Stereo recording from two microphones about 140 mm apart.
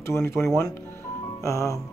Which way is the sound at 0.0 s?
20° left (ahead or behind).